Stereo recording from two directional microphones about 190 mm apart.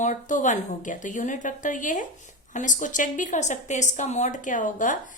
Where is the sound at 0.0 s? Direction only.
40° left (ahead or behind).